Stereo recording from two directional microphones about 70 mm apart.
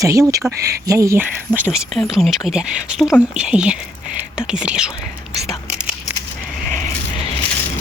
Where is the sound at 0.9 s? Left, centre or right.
Right.